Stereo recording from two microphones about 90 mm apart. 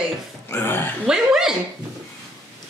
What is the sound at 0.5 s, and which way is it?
Speech, 25° left (ahead or behind).